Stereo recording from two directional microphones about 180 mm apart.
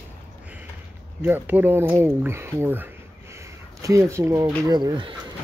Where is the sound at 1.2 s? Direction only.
10° right (ahead or behind); by 5.1 s 25° right (ahead or behind).